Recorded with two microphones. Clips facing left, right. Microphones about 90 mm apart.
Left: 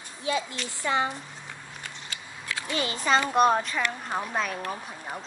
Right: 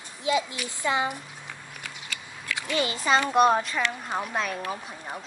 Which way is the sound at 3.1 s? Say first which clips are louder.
Right 1 dB; 10° right (ahead or behind).